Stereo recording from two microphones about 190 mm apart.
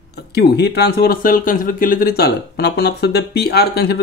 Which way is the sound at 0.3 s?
60° left (ahead or behind).